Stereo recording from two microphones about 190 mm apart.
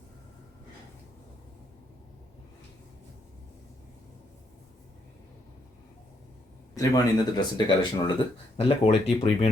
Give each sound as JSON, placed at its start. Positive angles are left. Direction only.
{"t": 6.7, "sound": "speech", "side_deg": 20}